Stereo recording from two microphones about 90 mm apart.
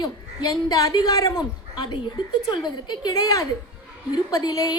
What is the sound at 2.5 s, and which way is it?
A woman's voice, 55° left (ahead or behind).